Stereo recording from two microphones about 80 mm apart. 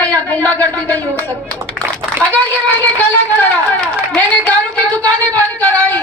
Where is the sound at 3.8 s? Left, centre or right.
Centre.